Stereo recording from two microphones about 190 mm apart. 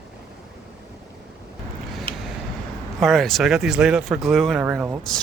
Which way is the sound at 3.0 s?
Centre (ahead or behind).